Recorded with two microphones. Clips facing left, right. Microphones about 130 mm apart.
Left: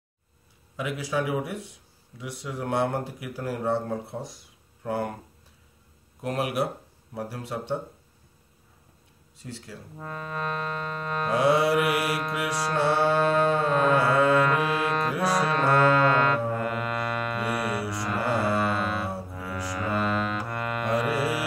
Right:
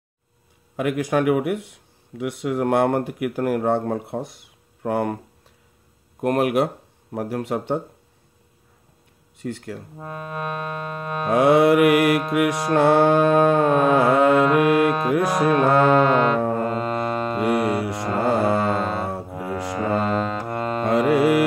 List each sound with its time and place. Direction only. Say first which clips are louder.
0.7 s speech: right 7 dB; 55° right (ahead or behind)
6.2 s speech: right 8 dB; 55° right (ahead or behind)
9.4 s speech: right 10 dB; 60° right (ahead or behind)
9.9 s music: even; 20° right (ahead or behind)
11.2 s speech: right 7 dB; 55° right (ahead or behind)
13.5 s carnatic music: right 5 dB; 65° right (ahead or behind)
14.6 s music: right 8 dB; 60° right (ahead or behind)
15.7 s music: right 1 dB; 20° right (ahead or behind)
17.7 s music: right 6 dB; 55° right (ahead or behind)
18.0 s music: right 6 dB; 25° right (ahead or behind)
19.3 s music: right 7 dB; 55° right (ahead or behind)
19.7 s music: right 5 dB; 25° right (ahead or behind)
21.0 s speech: right 10 dB; 60° right (ahead or behind)